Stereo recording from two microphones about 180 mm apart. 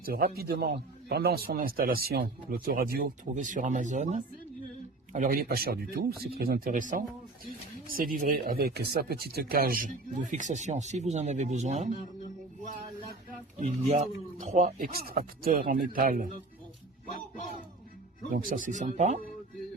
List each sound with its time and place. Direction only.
0.0 s a man's voice: 55° right (ahead or behind)
13.6 s speech: 40° right (ahead or behind)
14.9 s a man's voice: 55° right (ahead or behind)
18.3 s speech: 50° right (ahead or behind)